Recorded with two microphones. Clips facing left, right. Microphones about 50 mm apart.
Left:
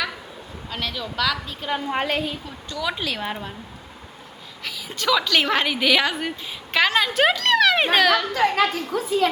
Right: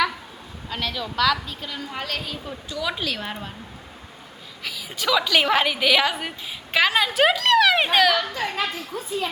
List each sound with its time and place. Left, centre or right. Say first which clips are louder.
0.7 s a woman's voice: right 1 dB; centre
1.6 s a woman's voice: left 7 dB; left
2.0 s a woman's voice: left 5 dB; centre
2.6 s a woman's voice: left 1 dB; centre
4.6 s a woman's voice: left 1 dB; centre
8.3 s a woman's voice: left 7 dB; left
9.0 s a woman's voice: left 7 dB; left